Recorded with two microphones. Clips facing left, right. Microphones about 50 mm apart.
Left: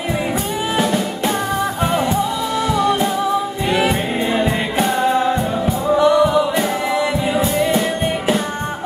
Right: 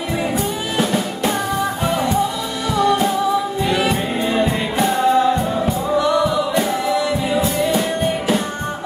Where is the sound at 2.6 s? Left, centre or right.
Left.